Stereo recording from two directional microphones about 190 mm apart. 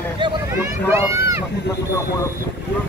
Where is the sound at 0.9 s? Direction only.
15° right (ahead or behind).